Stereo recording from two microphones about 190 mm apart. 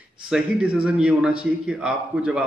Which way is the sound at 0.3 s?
5° right (ahead or behind).